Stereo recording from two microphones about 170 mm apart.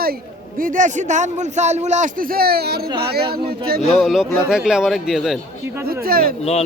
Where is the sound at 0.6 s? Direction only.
50° right (ahead or behind); by 3.2 s 70° right (ahead or behind).